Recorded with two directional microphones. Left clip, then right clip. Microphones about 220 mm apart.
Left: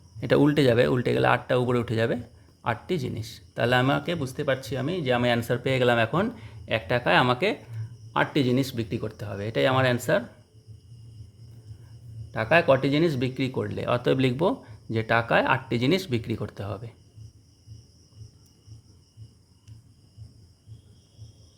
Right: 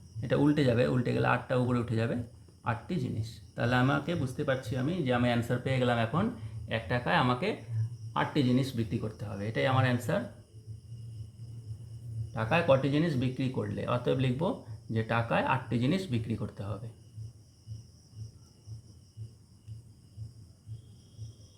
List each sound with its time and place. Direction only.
0.2 s speech: 50° left (ahead or behind)
12.3 s speech: 50° left (ahead or behind)